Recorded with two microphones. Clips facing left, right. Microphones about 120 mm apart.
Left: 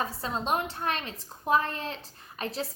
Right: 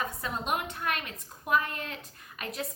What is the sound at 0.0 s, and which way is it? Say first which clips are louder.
A woman's voice: left 2 dB; 30° left (ahead or behind).